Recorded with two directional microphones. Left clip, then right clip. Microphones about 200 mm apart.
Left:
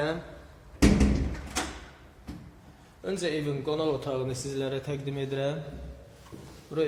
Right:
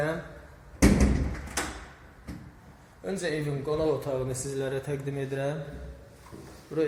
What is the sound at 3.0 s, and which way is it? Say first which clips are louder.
A man's voice: left 1 dB; centre (ahead or behind).